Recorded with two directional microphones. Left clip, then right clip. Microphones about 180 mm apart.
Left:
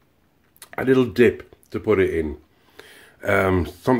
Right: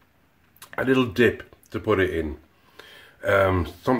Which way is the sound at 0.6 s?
25° left (ahead or behind).